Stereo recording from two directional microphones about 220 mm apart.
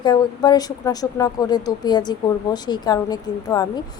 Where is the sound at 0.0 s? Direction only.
20° left (ahead or behind).